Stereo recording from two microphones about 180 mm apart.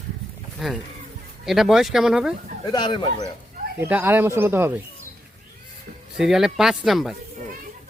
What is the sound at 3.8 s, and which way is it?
Speech, 10° right (ahead or behind).